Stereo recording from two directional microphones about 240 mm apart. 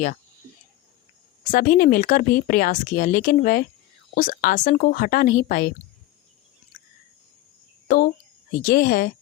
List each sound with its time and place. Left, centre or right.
1.5 s speech: left
7.9 s speech: left